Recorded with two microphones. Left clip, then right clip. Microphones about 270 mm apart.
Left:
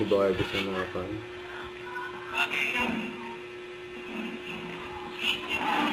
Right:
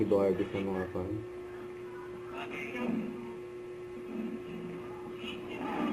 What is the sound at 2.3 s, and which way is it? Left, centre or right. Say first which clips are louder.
Music: left 13 dB; centre.